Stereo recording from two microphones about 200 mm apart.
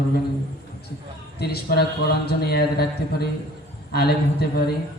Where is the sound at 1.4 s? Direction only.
50° left (ahead or behind).